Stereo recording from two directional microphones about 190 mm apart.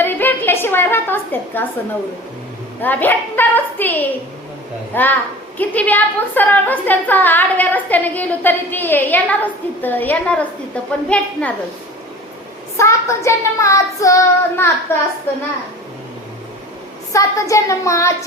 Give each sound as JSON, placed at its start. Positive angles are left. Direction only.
{"t": 0.0, "sound": "a sound", "side_deg": 10}
{"t": 2.8, "sound": "a woman's voice", "side_deg": 10}
{"t": 12.7, "sound": "a woman's voice", "side_deg": 15}
{"t": 17.1, "sound": "a woman's voice", "side_deg": 15}